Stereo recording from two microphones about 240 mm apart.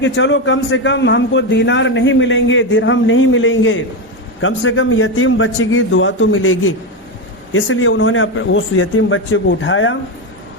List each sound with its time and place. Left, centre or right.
0.0 s a man's voice: left